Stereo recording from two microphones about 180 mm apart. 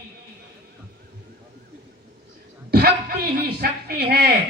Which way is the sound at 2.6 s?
60° right (ahead or behind).